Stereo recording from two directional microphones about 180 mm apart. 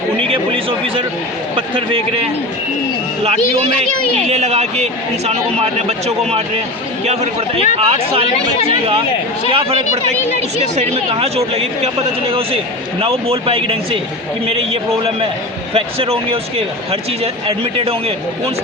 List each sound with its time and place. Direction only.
0.3 s a sound: 30° right (ahead or behind)
1.5 s a man's voice: 30° right (ahead or behind)
4.3 s a man's voice: 35° right (ahead or behind)
7.0 s a man's voice: 35° right (ahead or behind)
8.3 s speech: 35° left (ahead or behind)
9.5 s a man's voice: 30° right (ahead or behind)